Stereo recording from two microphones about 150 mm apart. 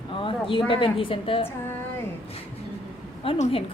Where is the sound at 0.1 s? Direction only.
35° left (ahead or behind).